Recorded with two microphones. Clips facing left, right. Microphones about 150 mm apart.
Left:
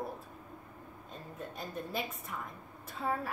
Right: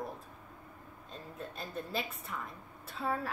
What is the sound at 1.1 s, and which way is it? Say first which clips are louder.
Speech: even; 15° left (ahead or behind).